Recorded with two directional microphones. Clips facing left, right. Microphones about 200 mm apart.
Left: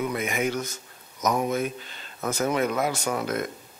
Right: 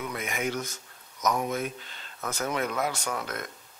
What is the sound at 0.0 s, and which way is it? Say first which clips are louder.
Speech: left 5 dB; 5° left (ahead or behind).